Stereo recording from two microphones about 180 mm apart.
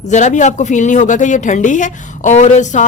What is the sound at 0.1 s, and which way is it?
A woman's voice, 40° left (ahead or behind).